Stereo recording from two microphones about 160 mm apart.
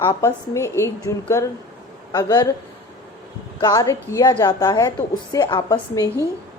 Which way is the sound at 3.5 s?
20° left (ahead or behind).